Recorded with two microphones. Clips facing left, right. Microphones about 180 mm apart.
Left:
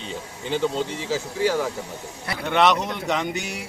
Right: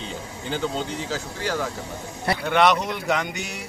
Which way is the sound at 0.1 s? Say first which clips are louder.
Left 5 dB; centre (ahead or behind).